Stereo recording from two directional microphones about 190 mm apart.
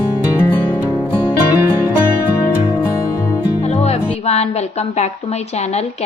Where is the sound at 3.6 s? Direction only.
35° left (ahead or behind).